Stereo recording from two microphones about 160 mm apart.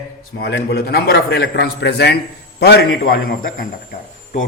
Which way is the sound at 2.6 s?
75° left (ahead or behind).